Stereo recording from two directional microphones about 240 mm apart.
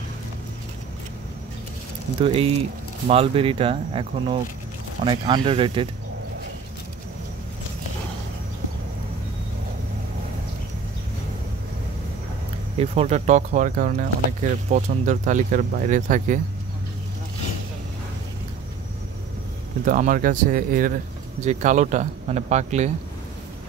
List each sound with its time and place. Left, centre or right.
2.2 s speech: right
12.7 s speech: right
19.8 s speech: right